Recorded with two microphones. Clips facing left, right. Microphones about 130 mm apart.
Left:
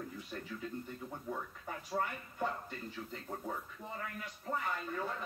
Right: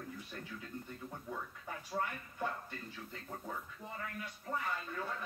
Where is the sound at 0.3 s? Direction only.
15° left (ahead or behind).